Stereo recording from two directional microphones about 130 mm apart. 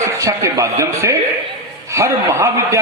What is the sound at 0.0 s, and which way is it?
A man's voice, 25° right (ahead or behind).